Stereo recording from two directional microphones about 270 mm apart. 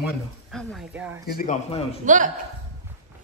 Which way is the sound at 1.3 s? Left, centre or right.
Left.